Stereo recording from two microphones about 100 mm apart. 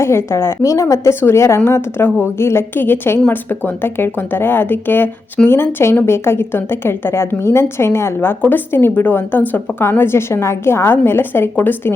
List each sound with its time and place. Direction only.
0.0 s a woman's voice: 25° left (ahead or behind)